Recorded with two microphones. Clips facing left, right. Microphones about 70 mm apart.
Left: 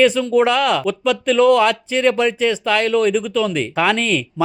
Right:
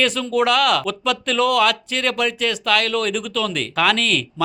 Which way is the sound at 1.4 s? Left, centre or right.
Left.